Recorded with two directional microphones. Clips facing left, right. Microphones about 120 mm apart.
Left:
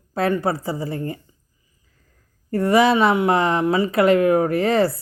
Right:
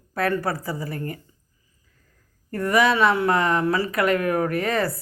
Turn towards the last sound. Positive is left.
turn(degrees=30)  # may be behind; listen again after turning